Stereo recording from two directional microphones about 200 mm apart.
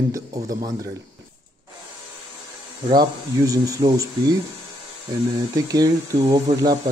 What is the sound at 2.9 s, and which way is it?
Speech, 20° right (ahead or behind).